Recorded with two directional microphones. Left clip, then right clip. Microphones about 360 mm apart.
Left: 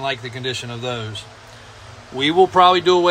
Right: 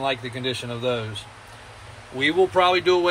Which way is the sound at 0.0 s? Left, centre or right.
Centre.